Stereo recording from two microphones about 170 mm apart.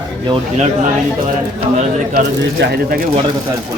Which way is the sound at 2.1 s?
65° right (ahead or behind).